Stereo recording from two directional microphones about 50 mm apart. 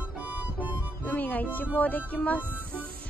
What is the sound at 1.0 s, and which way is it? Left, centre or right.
Music, left.